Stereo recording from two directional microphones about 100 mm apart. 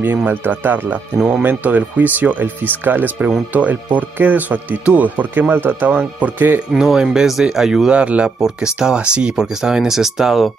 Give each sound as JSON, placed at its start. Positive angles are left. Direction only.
{"t": 0.0, "sound": "speech", "side_deg": -20}
{"t": 6.7, "sound": "speech", "side_deg": -5}